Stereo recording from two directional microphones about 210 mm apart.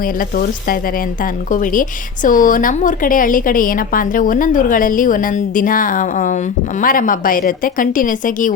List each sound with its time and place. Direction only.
0.0 s speech: 40° left (ahead or behind)